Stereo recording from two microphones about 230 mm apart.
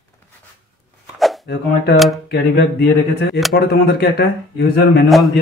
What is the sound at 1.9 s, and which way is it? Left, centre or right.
Speech, centre.